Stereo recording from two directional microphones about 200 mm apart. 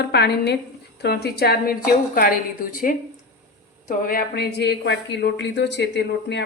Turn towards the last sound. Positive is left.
turn(degrees=60)  # may be behind; listen again after turning